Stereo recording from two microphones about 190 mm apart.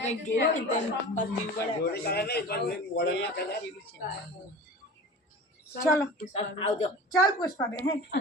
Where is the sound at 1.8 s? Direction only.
60° left (ahead or behind).